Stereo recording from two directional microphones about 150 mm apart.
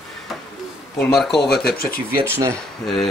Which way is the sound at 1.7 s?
90° left.